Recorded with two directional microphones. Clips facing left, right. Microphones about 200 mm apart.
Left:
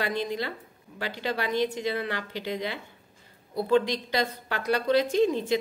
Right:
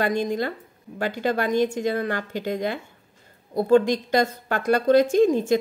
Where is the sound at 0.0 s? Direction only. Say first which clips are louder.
Right 6 dB; 45° right (ahead or behind).